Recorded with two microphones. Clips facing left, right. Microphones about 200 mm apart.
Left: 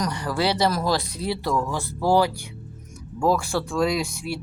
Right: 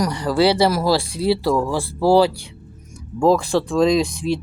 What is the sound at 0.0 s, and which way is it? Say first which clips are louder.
Speech: right 7 dB; 15° right (ahead or behind).